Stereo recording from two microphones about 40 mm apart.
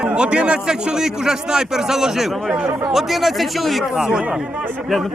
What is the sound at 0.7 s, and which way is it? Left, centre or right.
A man's voice, centre.